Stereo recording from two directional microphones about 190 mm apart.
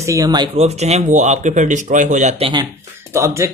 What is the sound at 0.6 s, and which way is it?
Speech, 35° right (ahead or behind).